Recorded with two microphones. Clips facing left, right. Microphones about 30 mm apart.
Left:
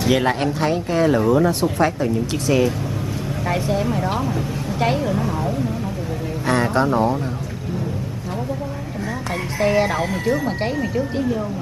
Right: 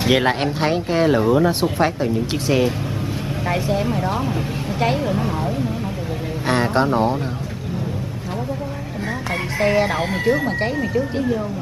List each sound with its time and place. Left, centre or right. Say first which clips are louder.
0.0 s speech: right 1 dB; right
3.4 s speech: even; centre
5.1 s speech: even; right
9.6 s speech: even; centre
10.6 s speech: right 1 dB; centre